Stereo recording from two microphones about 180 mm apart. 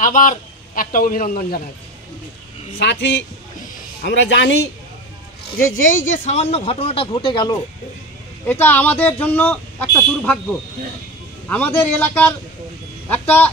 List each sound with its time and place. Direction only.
0.0 s a man's voice: 45° left (ahead or behind)
2.8 s speech: 75° left (ahead or behind)
5.9 s speech: 45° left (ahead or behind); by 7.5 s 25° left (ahead or behind)
8.5 s speech: 10° left (ahead or behind)
11.4 s speech: 10° left (ahead or behind)